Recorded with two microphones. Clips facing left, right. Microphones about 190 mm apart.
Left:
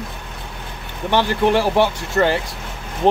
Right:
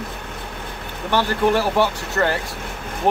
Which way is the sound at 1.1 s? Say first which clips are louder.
Left 2 dB; 20° left (ahead or behind).